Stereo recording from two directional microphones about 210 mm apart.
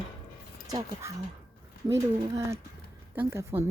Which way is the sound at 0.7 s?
15° right (ahead or behind).